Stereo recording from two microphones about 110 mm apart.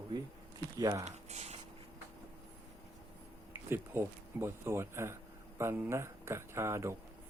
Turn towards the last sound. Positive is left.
turn(degrees=-25)  # may be behind; listen again after turning